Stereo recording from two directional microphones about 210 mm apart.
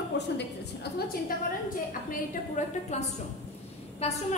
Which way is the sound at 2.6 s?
35° left (ahead or behind).